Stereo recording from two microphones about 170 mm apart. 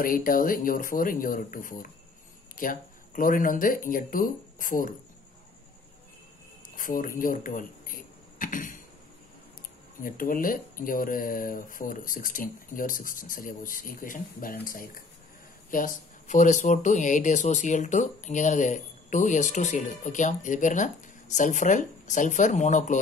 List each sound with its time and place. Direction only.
0.0 s speech: 55° left (ahead or behind)
6.7 s speech: 55° left (ahead or behind)
10.0 s speech: 55° left (ahead or behind)